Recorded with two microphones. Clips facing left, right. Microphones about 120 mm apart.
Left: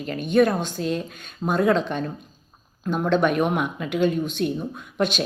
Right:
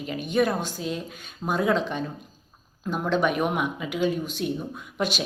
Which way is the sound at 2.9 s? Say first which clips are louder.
Left 3 dB; 10° right (ahead or behind).